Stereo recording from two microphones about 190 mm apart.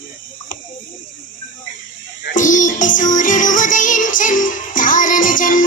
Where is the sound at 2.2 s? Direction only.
45° left (ahead or behind).